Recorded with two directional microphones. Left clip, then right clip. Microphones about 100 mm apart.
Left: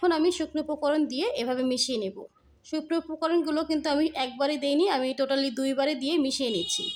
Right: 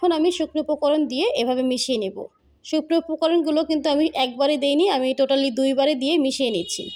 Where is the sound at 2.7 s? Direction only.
40° right (ahead or behind).